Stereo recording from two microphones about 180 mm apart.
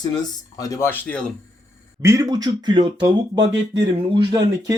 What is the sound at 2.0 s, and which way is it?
Speech, 20° right (ahead or behind).